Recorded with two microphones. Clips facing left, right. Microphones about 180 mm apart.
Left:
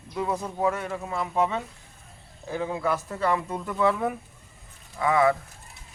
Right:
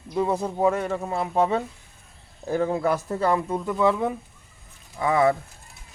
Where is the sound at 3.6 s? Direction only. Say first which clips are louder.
Right 2 dB; 15° right (ahead or behind).